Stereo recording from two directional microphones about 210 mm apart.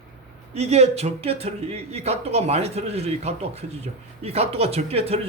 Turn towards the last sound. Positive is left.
turn(degrees=-30)  # may be behind; listen again after turning